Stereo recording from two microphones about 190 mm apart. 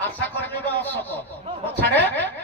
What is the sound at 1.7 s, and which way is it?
Snicker, 10° left (ahead or behind).